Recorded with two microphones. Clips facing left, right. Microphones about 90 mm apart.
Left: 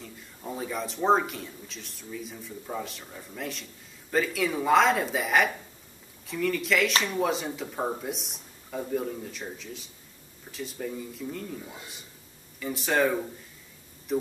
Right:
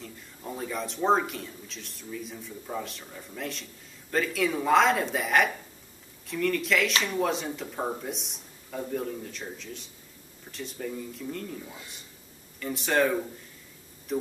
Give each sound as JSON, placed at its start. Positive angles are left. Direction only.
{"t": 0.0, "sound": "speech", "side_deg": 0}